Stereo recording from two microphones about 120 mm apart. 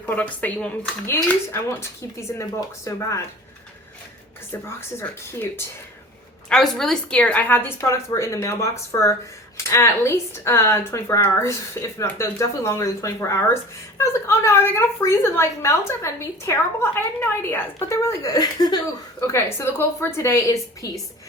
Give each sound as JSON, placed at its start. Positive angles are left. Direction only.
{"t": 0.0, "sound": "a woman's voice", "side_deg": 10}
{"t": 4.9, "sound": "a woman's voice", "side_deg": 20}
{"t": 6.5, "sound": "a woman's voice", "side_deg": 5}